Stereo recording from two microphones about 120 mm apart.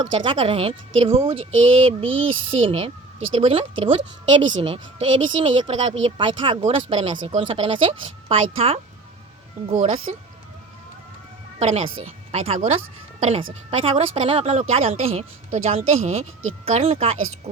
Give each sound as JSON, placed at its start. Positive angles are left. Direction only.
{"t": 0.1, "sound": "speech", "side_deg": -45}
{"t": 9.7, "sound": "speech", "side_deg": -80}
{"t": 11.6, "sound": "a woman's voice", "side_deg": -55}